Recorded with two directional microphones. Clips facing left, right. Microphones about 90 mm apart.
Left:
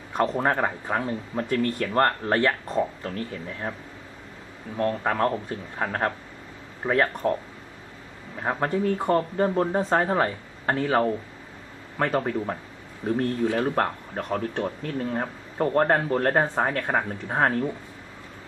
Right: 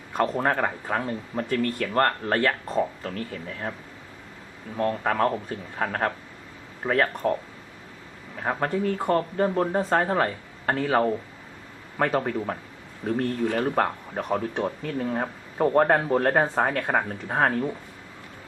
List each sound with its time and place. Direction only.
0.3 s speech: 5° left (ahead or behind)
5.0 s speech: centre (ahead or behind)
8.4 s speech: 5° left (ahead or behind)
13.0 s speech: 20° left (ahead or behind)
13.7 s speech: 5° right (ahead or behind)